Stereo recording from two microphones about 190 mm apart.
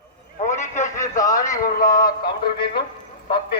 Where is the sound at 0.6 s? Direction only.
40° left (ahead or behind).